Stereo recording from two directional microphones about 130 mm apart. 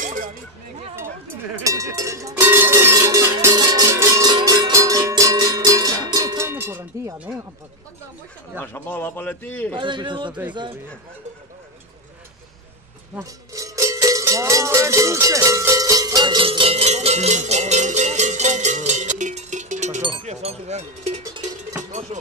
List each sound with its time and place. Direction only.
0.0 s a sound: 90° right
0.9 s cowbell: 20° right (ahead or behind)
3.5 s music: 30° right (ahead or behind)
8.5 s a man's voice: 15° left (ahead or behind)
9.8 s speech: 35° right (ahead or behind)
13.2 s cowbell: 25° right (ahead or behind); by 20.0 s 65° right (ahead or behind)
20.2 s speech: 60° right (ahead or behind)